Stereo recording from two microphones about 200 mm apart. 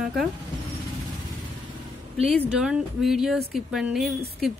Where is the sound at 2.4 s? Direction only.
5° right (ahead or behind).